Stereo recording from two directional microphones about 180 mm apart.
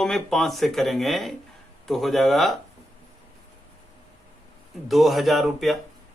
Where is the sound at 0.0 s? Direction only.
Centre (ahead or behind).